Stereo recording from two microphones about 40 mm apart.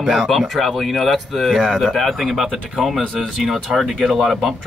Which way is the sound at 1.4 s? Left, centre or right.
Centre.